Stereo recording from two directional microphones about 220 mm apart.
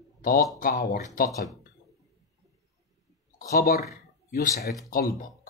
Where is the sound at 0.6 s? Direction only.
40° left (ahead or behind).